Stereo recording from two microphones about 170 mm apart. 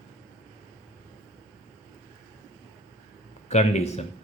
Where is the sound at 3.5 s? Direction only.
40° left (ahead or behind).